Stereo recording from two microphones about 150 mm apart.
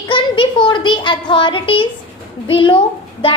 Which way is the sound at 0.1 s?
35° left (ahead or behind).